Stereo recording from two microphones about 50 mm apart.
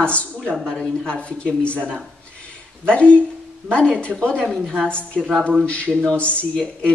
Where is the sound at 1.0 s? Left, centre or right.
Left.